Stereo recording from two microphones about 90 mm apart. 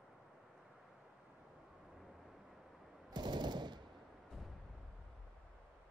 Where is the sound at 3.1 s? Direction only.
55° right (ahead or behind).